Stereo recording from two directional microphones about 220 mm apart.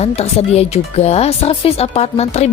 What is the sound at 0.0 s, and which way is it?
Speech, 30° left (ahead or behind).